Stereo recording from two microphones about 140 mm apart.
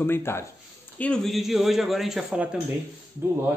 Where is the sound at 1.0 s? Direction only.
5° left (ahead or behind).